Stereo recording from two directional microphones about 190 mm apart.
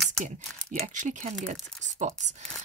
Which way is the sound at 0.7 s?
35° right (ahead or behind).